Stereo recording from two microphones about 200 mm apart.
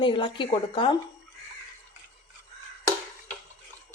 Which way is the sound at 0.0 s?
25° left (ahead or behind).